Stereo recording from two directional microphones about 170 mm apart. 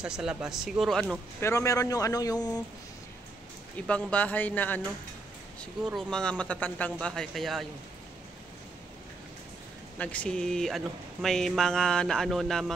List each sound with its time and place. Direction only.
0.0 s speech: 5° right (ahead or behind)
1.4 s a man's voice: 20° left (ahead or behind)
3.8 s speech: 5° left (ahead or behind)
5.9 s speech: centre (ahead or behind)
9.9 s speech: 5° left (ahead or behind)